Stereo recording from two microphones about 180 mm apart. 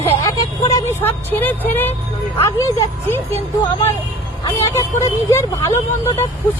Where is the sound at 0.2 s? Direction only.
20° left (ahead or behind).